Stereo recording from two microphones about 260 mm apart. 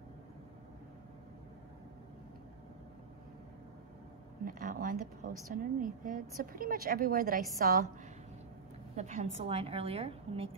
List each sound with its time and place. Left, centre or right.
4.5 s a woman's voice: right
8.9 s a woman's voice: right